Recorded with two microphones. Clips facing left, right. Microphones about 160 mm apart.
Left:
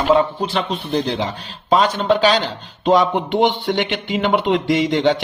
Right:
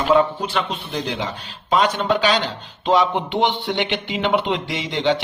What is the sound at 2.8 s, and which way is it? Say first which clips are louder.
Speech: left 3 dB; 45° left (ahead or behind).